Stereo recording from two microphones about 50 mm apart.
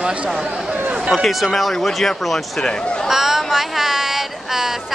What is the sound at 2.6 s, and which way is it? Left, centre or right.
Speech, centre.